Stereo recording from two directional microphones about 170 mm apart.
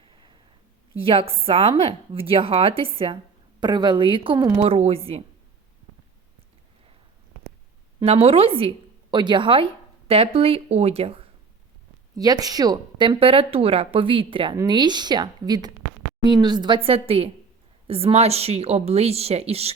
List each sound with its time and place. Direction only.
0.0 s a sound: 30° right (ahead or behind)
0.9 s speech: 35° right (ahead or behind)
7.9 s a woman's voice: 35° right (ahead or behind)
12.1 s a woman's voice: 20° right (ahead or behind)